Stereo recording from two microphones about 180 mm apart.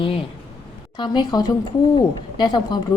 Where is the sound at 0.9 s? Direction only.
25° left (ahead or behind).